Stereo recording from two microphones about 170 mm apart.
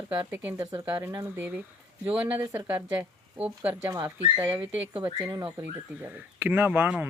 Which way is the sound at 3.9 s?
20° right (ahead or behind).